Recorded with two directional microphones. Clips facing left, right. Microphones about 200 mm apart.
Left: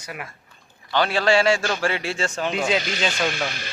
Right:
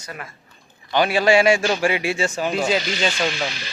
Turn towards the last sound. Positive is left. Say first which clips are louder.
# right 1 dB
turn(degrees=50)  # may be behind; listen again after turning